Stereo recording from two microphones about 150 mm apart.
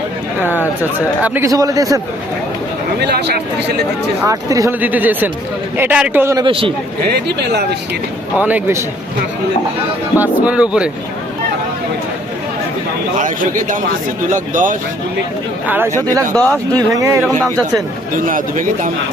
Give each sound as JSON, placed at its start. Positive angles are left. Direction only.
{"t": 0.4, "sound": "speech", "side_deg": 15}
{"t": 0.9, "sound": "speech", "side_deg": -10}
{"t": 1.5, "sound": "speech", "side_deg": -25}
{"t": 3.0, "sound": "speech", "side_deg": -90}
{"t": 4.3, "sound": "speech", "side_deg": -20}
{"t": 4.8, "sound": "speech", "side_deg": -10}
{"t": 6.3, "sound": "a man's voice", "side_deg": -35}
{"t": 7.1, "sound": "speech", "side_deg": -90}
{"t": 8.4, "sound": "speech", "side_deg": -10}
{"t": 10.2, "sound": "speech", "side_deg": -10}
{"t": 13.1, "sound": "speech", "side_deg": -60}
{"t": 16.3, "sound": "speech", "side_deg": 10}
{"t": 16.7, "sound": "speech", "side_deg": -20}
{"t": 18.1, "sound": "speech", "side_deg": -65}